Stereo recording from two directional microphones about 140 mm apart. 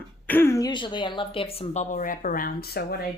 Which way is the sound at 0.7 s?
35° left (ahead or behind).